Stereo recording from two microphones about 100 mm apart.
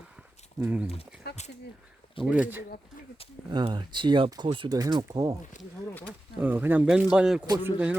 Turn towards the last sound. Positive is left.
turn(degrees=-15)  # may be behind; listen again after turning